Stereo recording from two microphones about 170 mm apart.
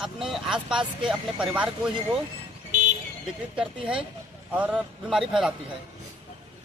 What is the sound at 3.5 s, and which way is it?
Speech, 5° right (ahead or behind).